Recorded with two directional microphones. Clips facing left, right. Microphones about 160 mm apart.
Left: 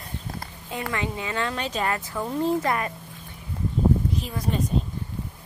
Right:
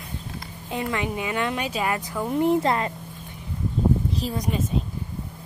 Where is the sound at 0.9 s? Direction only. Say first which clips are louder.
Even; 15° right (ahead or behind).